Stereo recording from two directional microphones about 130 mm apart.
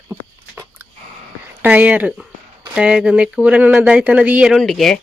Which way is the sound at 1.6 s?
10° right (ahead or behind).